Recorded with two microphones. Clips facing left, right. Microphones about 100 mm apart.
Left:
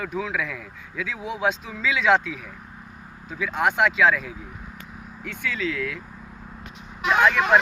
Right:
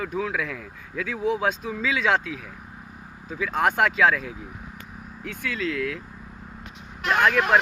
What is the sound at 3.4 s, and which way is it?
Speech, 40° right (ahead or behind).